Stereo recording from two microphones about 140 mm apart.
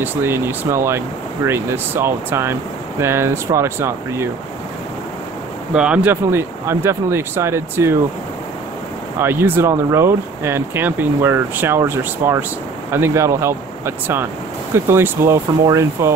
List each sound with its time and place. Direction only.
0.0 s speech: 15° right (ahead or behind)
5.7 s speech: 5° right (ahead or behind)
9.2 s speech: 15° right (ahead or behind)